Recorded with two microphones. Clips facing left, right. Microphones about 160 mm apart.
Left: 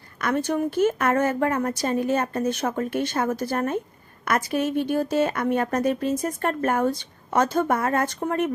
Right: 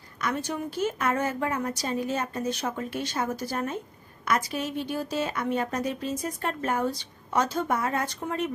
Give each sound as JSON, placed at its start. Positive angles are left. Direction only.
{"t": 0.2, "sound": "a woman's voice", "side_deg": 55}